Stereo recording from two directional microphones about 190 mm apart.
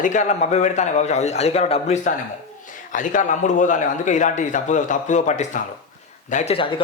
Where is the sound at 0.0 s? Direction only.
40° left (ahead or behind).